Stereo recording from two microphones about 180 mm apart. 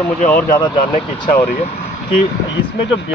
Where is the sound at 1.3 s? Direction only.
45° left (ahead or behind).